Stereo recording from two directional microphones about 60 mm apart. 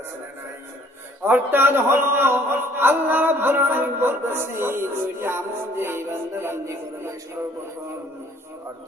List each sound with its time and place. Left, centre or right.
1.2 s a man's voice: right